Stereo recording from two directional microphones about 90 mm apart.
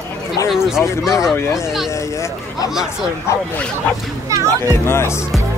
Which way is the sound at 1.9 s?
35° left (ahead or behind).